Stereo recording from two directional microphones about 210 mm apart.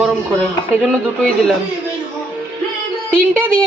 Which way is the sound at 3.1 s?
5° left (ahead or behind).